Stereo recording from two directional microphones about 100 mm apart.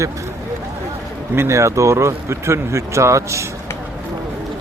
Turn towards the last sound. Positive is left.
turn(degrees=-30)  # may be behind; listen again after turning